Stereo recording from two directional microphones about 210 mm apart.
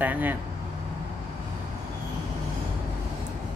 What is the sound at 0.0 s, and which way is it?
Speech, 10° right (ahead or behind).